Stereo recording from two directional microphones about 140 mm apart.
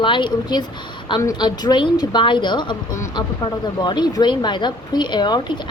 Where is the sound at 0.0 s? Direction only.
35° left (ahead or behind).